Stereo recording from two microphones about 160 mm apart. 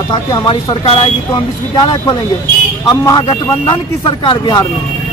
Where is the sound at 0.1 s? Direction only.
20° left (ahead or behind).